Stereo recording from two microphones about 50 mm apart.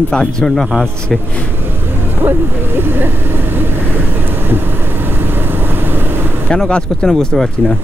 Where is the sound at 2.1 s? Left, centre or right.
Right.